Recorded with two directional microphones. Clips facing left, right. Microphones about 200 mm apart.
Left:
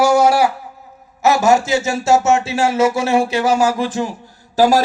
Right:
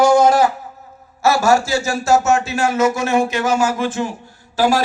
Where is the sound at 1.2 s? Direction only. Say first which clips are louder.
Left 1 dB; 20° left (ahead or behind).